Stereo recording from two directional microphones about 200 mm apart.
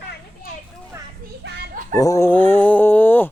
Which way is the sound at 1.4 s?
55° right (ahead or behind).